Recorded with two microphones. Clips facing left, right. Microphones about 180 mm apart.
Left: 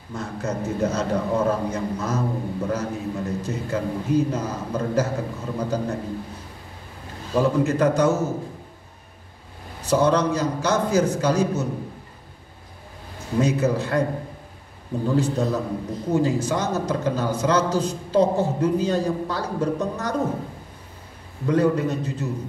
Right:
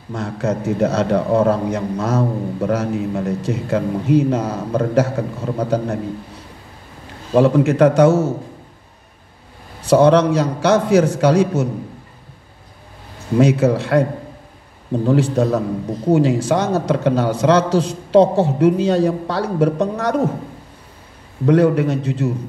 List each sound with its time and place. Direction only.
0.1 s a man's voice: 70° right (ahead or behind)
7.3 s a man's voice: 70° right (ahead or behind)
9.8 s a man's voice: 70° right (ahead or behind)
13.4 s a man's voice: 70° right (ahead or behind)
15.0 s a man's voice: 70° right (ahead or behind)
21.5 s a man's voice: 70° right (ahead or behind)